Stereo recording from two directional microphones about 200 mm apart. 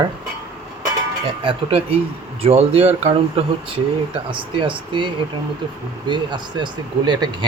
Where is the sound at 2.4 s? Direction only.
30° right (ahead or behind).